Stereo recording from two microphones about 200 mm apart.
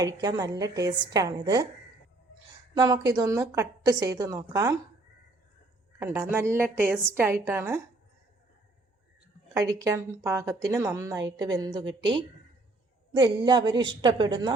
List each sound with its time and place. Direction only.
0.0 s a woman's voice: 20° right (ahead or behind)
2.7 s a woman's voice: 20° right (ahead or behind)
6.0 s a woman's voice: 10° right (ahead or behind)
9.6 s a woman's voice: 15° right (ahead or behind)
13.1 s a woman's voice: 20° right (ahead or behind)